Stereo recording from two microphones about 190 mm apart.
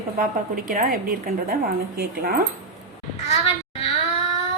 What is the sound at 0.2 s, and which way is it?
A woman's voice, 45° right (ahead or behind).